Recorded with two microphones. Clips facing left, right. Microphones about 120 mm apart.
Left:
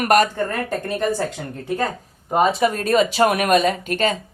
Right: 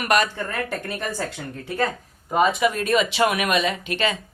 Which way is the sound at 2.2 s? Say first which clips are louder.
Left 2 dB; 35° left (ahead or behind).